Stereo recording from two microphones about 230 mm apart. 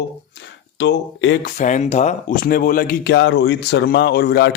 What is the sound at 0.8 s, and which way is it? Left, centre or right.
Speech, left.